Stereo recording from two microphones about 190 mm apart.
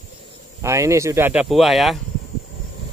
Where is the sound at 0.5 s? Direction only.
15° right (ahead or behind).